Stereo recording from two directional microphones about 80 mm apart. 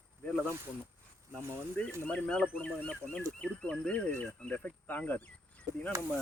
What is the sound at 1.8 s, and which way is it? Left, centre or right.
Speech, centre.